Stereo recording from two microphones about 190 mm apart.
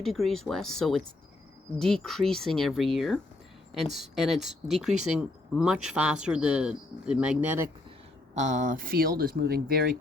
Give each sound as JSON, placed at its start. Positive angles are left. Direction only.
{"t": 0.0, "sound": "speech", "side_deg": 0}
{"t": 8.4, "sound": "speech", "side_deg": -40}